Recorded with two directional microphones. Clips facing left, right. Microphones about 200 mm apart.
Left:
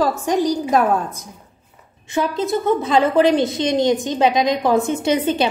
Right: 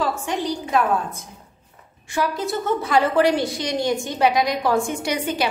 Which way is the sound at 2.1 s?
20° left (ahead or behind).